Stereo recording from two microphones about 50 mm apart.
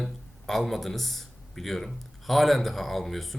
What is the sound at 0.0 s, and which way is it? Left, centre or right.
Speech, centre.